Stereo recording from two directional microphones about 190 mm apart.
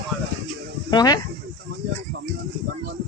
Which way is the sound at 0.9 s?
20° left (ahead or behind).